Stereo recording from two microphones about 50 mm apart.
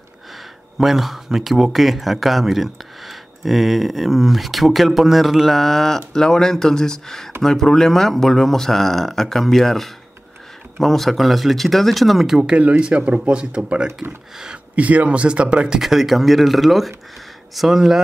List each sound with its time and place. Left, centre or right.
0.7 s speech: centre
12.4 s speech: right
14.8 s speech: right
15.8 s speech: centre